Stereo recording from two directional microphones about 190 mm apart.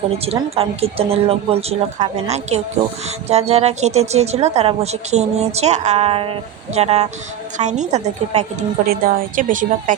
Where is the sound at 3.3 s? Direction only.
35° right (ahead or behind).